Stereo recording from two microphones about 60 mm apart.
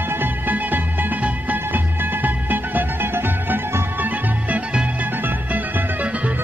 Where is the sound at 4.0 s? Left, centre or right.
Right.